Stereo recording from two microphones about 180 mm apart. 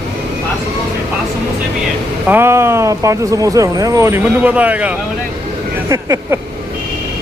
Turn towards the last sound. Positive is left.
turn(degrees=-15)  # may be behind; listen again after turning